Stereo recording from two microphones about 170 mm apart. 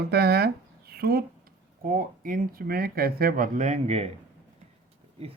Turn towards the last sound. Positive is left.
turn(degrees=-40)  # may be behind; listen again after turning